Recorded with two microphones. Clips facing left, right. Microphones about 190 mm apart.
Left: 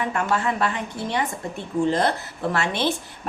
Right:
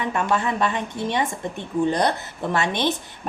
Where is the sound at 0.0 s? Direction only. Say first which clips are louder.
Right 1 dB; 20° right (ahead or behind).